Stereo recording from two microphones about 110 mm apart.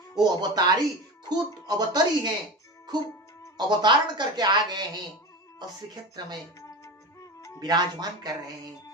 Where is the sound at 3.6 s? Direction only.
40° right (ahead or behind).